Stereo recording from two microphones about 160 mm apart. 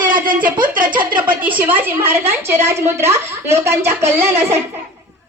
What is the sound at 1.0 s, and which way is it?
Speech, 10° right (ahead or behind).